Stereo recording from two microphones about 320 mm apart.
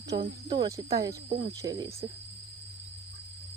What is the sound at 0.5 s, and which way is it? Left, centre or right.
Speech, centre.